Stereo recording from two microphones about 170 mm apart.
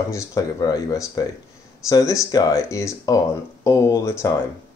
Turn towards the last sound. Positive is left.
turn(degrees=20)  # may be behind; listen again after turning